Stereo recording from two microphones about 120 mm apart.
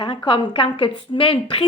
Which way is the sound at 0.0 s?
40° left (ahead or behind).